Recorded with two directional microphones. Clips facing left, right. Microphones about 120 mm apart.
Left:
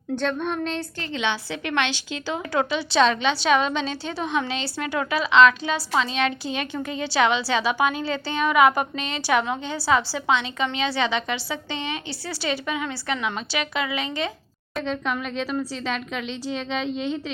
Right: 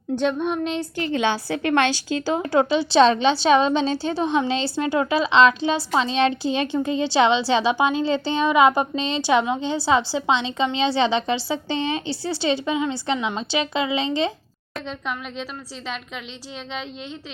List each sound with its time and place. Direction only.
0.2 s speech: 15° right (ahead or behind)
1.1 s a woman's voice: 45° right (ahead or behind); by 14.3 s 25° right (ahead or behind)
14.8 s speech: 5° right (ahead or behind)